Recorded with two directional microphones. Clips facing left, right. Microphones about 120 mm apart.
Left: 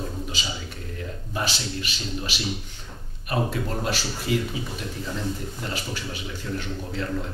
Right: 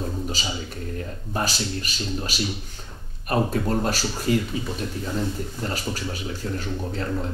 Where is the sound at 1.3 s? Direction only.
40° right (ahead or behind).